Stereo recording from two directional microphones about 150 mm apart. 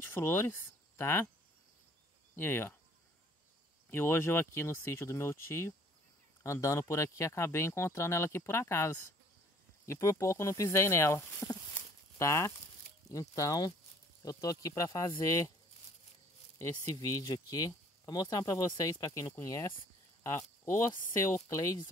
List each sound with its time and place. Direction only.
0.0 s speech: 15° left (ahead or behind)
2.3 s speech: 15° left (ahead or behind)
3.9 s speech: 15° left (ahead or behind)
16.5 s speech: 20° left (ahead or behind)